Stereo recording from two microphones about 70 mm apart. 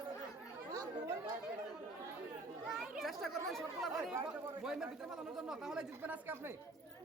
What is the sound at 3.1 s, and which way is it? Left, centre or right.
Speech, centre.